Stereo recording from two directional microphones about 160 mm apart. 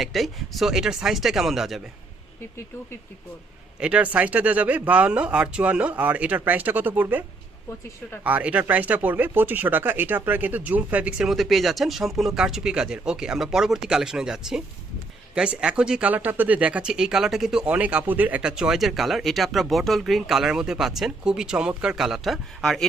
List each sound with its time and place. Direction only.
0.0 s speech: centre (ahead or behind)
3.8 s speech: 5° right (ahead or behind)